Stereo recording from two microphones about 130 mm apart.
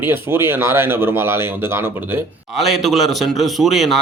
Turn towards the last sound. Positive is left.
turn(degrees=0)  # may be behind; listen again after turning